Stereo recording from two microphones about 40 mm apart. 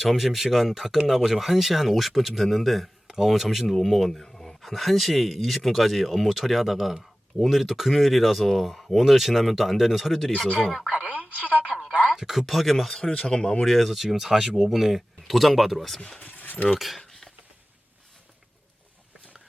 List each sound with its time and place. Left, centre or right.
0.0 s speech: centre
3.8 s speech: centre
4.6 s speech: centre
11.2 s a woman's voice: right
12.1 s speech: centre
13.0 s speech: left
13.7 s speech: centre
16.2 s keys jangling: left
16.7 s speech: centre
17.1 s a sound: centre